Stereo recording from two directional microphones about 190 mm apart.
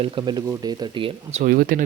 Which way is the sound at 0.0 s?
25° right (ahead or behind).